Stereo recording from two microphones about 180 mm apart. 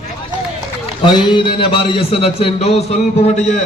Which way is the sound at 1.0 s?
25° left (ahead or behind).